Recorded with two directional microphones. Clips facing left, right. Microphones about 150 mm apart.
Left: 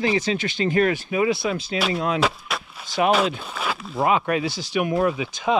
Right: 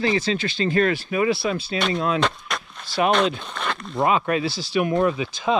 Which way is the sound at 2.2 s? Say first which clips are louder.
Left 1 dB; 5° left (ahead or behind).